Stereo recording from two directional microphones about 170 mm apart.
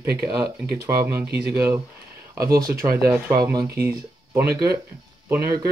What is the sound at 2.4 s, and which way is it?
Speech, 60° right (ahead or behind).